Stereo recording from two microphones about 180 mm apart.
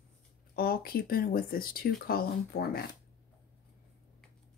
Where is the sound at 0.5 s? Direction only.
55° left (ahead or behind).